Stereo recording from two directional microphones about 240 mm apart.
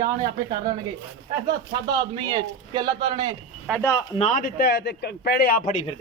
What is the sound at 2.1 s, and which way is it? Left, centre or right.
Speech, centre.